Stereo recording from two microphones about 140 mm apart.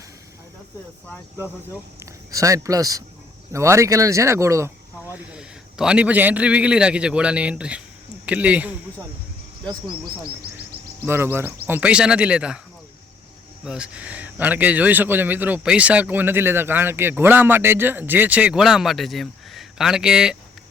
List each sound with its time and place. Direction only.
2.3 s speech: 25° right (ahead or behind)
5.3 s a man's voice: 5° right (ahead or behind)
11.0 s a man's voice: 15° right (ahead or behind)
13.7 s a man's voice: 5° right (ahead or behind)